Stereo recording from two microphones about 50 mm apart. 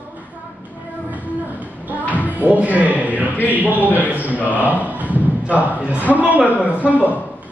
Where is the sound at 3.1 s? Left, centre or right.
Right.